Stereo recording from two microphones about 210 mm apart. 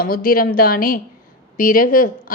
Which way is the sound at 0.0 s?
45° left (ahead or behind).